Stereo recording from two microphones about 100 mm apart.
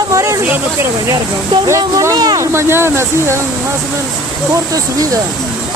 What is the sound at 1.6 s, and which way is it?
Speech, 30° right (ahead or behind).